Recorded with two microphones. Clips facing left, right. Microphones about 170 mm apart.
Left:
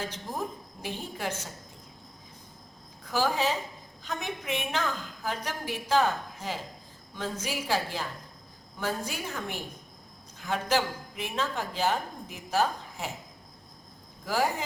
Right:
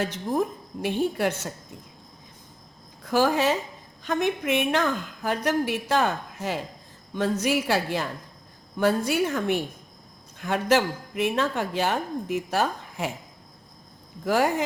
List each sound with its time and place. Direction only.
0.0 s a woman's voice: 65° right (ahead or behind)
3.1 s a woman's voice: 70° right (ahead or behind)
14.3 s speech: 65° right (ahead or behind)